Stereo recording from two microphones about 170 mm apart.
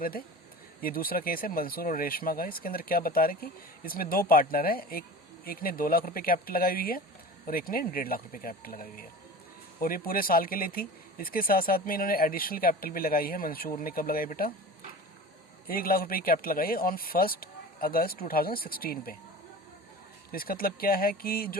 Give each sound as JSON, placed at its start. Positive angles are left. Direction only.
{"t": 0.8, "sound": "speech", "side_deg": 60}
{"t": 15.6, "sound": "speech", "side_deg": 60}
{"t": 20.3, "sound": "speech", "side_deg": 60}